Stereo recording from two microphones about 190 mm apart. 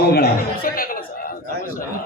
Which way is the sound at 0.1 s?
55° left (ahead or behind).